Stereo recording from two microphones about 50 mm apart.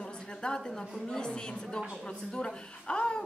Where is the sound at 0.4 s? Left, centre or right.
Centre.